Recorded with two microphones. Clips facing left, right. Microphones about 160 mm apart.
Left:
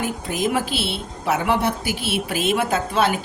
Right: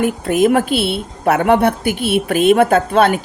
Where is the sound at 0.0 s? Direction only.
60° right (ahead or behind).